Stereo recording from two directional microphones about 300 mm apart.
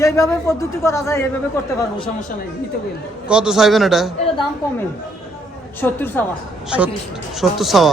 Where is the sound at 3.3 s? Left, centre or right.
Centre.